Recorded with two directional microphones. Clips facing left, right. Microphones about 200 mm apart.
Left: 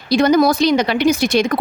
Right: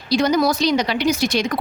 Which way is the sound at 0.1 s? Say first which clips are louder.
Left 4 dB; 55° left (ahead or behind).